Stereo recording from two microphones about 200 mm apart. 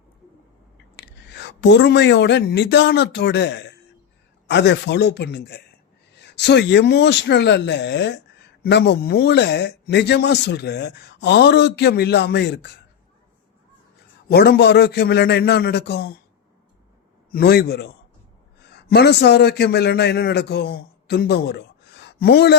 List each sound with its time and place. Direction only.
1.0 s speech: 60° left (ahead or behind)
14.3 s speech: 50° left (ahead or behind)
17.3 s a man's voice: 50° left (ahead or behind)